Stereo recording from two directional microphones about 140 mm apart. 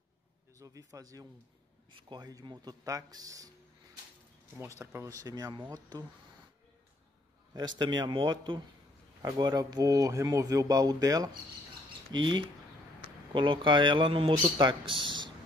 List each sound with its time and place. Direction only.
0.6 s speech: 25° right (ahead or behind)
1.9 s speech: 35° right (ahead or behind)
4.6 s speech: 20° right (ahead or behind)
7.5 s a man's voice: 30° right (ahead or behind)